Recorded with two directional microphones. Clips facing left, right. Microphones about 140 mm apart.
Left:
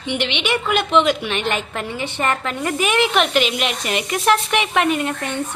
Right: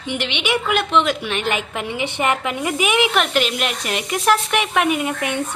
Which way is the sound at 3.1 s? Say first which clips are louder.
Left 1 dB; centre (ahead or behind).